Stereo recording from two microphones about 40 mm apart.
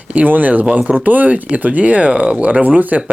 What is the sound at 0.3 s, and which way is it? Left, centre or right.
Speech, right.